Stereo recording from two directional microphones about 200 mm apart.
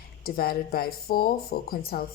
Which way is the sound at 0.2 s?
50° left (ahead or behind).